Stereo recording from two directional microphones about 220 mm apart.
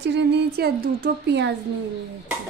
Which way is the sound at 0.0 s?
50° right (ahead or behind).